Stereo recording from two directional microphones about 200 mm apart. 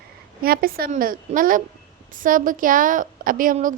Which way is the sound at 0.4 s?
50° right (ahead or behind).